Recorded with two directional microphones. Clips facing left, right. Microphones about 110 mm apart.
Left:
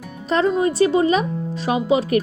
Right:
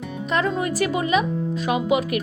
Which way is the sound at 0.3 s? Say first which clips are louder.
Left 5 dB; 30° left (ahead or behind).